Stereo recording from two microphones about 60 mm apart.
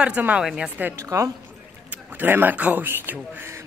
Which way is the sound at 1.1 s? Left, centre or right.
Right.